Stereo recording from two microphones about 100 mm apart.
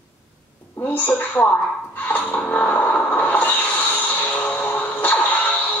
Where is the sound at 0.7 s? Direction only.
15° left (ahead or behind).